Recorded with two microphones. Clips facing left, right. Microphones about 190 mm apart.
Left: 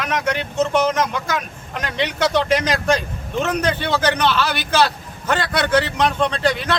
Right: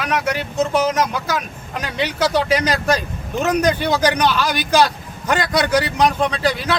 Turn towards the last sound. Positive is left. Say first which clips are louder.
# even
turn(degrees=-10)  # may be behind; listen again after turning